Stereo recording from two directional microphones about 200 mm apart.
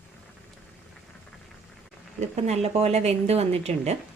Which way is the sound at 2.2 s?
35° right (ahead or behind).